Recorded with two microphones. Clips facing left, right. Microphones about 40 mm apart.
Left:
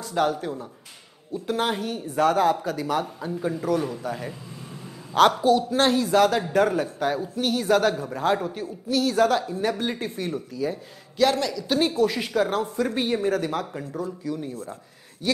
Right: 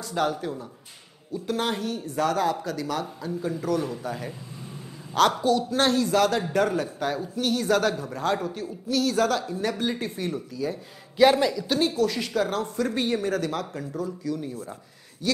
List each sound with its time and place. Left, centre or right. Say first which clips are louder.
0.0 s a man's voice: left 2 dB; centre
5.4 s a man's voice: left 3 dB; centre
11.1 s a man's voice: right 3 dB; centre
11.8 s a man's voice: left 2 dB; centre